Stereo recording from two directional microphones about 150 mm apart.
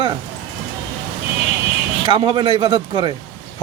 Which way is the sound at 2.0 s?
30° right (ahead or behind).